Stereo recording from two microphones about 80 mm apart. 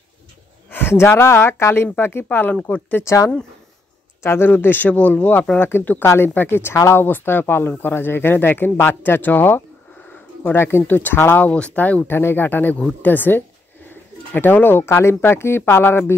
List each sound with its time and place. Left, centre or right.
0.7 s speech: left
3.0 s speech: left